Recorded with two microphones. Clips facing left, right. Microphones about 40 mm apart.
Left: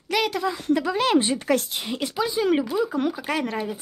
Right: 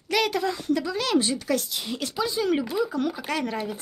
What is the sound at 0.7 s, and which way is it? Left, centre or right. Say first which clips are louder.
Speech: left 6 dB; left.